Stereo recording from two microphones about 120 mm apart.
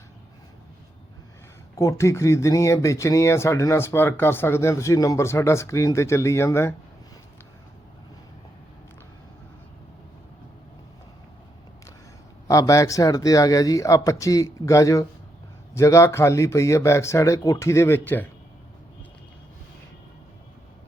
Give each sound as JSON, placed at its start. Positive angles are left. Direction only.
{"t": 1.7, "sound": "speech", "side_deg": 25}
{"t": 12.5, "sound": "speech", "side_deg": 25}